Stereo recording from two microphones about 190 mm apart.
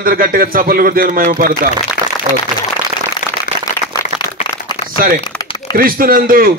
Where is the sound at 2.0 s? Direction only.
45° left (ahead or behind).